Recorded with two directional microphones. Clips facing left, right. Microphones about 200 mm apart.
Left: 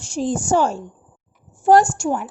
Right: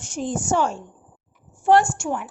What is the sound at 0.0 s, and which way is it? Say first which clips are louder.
A woman's voice: left 4 dB; 30° left (ahead or behind).